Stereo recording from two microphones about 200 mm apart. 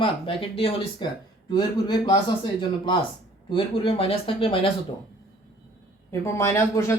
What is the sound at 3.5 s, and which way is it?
Speech, 25° left (ahead or behind).